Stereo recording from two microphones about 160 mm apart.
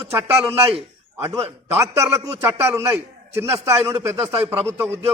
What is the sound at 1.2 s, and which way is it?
A man's voice, 15° right (ahead or behind).